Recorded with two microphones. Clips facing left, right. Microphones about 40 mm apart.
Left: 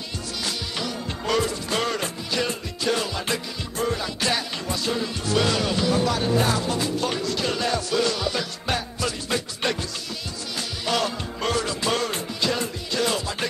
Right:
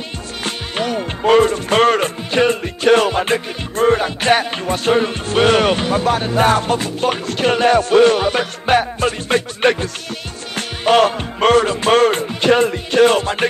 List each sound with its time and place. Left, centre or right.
0.4 s music: right